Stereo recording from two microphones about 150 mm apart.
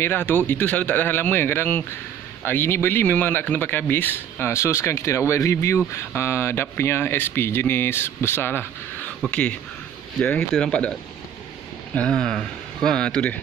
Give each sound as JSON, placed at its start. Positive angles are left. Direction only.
{"t": 0.0, "sound": "speech", "side_deg": 15}